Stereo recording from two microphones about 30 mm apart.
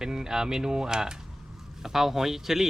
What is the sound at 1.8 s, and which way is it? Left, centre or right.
Speech, centre.